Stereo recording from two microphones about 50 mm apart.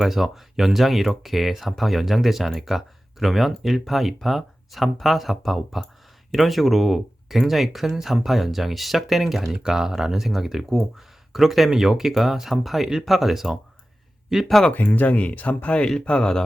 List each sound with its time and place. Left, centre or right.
0.0 s speech: centre
14.4 s speech: centre
14.7 s speech: left; by 16.4 s centre